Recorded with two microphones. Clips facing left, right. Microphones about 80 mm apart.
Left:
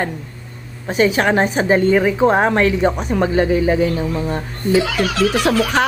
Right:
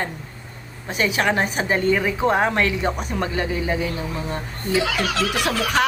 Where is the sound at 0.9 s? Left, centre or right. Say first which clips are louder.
Left 6 dB; left.